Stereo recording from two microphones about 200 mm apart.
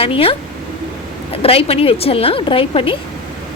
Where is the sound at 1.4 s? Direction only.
30° left (ahead or behind).